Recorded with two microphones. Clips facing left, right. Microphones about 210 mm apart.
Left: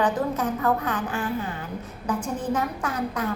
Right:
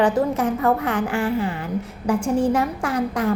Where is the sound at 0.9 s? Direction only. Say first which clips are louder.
Right 6 dB; 75° right (ahead or behind).